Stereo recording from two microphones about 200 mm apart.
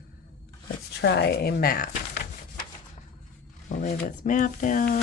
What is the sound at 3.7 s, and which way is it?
Speech, 40° left (ahead or behind).